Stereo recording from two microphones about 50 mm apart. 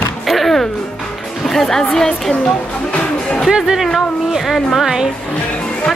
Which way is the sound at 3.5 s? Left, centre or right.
Centre.